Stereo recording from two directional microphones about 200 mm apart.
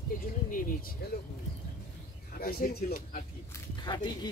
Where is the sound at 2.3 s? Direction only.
45° left (ahead or behind).